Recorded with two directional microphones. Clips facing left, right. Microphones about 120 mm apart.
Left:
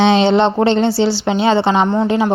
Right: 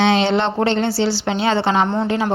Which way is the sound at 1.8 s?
Centre (ahead or behind).